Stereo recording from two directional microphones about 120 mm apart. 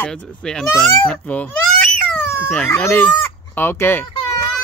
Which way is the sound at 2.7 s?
20° left (ahead or behind).